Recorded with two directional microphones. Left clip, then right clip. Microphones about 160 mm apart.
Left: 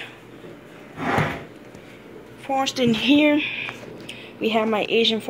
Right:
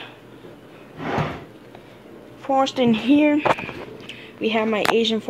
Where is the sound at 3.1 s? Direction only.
15° right (ahead or behind).